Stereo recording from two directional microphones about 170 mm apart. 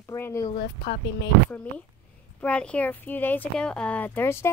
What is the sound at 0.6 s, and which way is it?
Speech, 70° left (ahead or behind).